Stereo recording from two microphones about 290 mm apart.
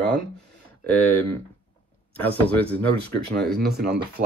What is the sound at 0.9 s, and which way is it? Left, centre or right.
Speech, centre.